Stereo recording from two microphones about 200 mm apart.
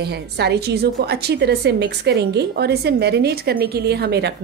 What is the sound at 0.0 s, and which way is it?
A woman's voice, 55° right (ahead or behind).